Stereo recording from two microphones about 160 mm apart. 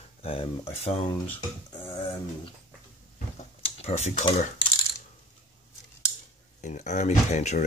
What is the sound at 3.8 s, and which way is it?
Speech, 45° left (ahead or behind).